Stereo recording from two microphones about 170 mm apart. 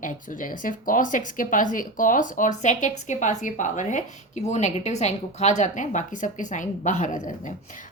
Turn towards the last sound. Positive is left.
turn(degrees=45)  # may be behind; listen again after turning